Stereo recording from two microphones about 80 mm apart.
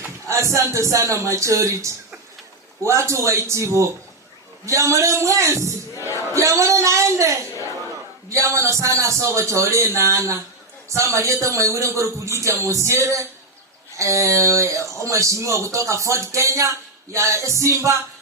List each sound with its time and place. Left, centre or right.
0.3 s speech: right